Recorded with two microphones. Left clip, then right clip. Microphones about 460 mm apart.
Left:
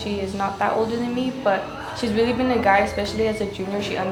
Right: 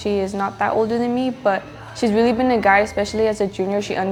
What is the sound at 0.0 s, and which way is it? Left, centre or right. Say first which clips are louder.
A woman's voice: right 4 dB; right.